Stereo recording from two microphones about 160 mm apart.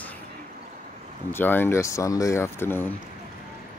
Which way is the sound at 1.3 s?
15° left (ahead or behind).